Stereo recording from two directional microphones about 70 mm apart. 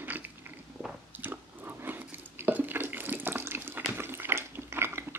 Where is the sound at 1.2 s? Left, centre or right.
Right.